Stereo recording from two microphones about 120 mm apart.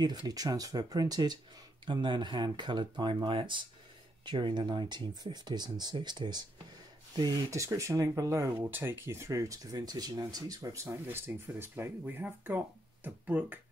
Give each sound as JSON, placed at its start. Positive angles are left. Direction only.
{"t": 0.0, "sound": "speech", "side_deg": -35}